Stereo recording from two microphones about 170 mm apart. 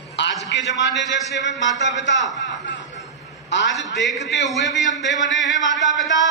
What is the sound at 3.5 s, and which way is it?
Speech, 90° left.